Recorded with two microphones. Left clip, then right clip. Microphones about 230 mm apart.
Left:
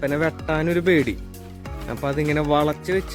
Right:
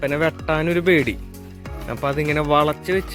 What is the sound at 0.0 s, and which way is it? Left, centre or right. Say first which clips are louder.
Speech: right 2 dB; centre.